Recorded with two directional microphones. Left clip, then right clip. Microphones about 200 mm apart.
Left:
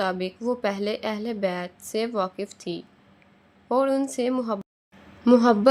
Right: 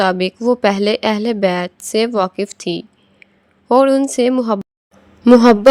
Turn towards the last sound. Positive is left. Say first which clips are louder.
# right 9 dB
turn(degrees=-30)  # may be behind; listen again after turning